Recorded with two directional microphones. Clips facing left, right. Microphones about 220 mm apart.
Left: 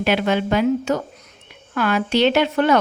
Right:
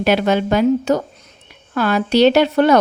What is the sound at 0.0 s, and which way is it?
A woman's voice, 40° right (ahead or behind).